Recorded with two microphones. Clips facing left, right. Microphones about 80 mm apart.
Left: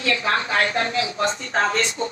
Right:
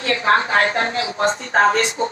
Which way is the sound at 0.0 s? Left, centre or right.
Right.